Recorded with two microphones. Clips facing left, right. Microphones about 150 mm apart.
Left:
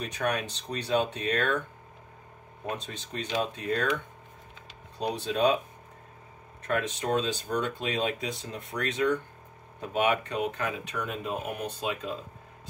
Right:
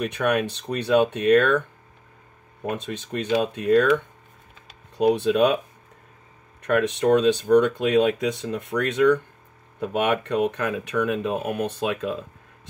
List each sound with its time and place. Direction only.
0.0 s speech: 60° right (ahead or behind)
2.6 s speech: 60° right (ahead or behind)
4.9 s speech: 65° right (ahead or behind)
6.6 s speech: 65° right (ahead or behind)